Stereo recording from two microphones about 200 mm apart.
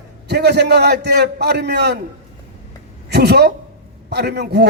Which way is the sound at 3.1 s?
55° right (ahead or behind).